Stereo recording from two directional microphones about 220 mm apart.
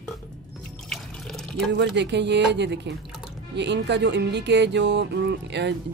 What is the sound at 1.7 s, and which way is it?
Speech, 50° right (ahead or behind).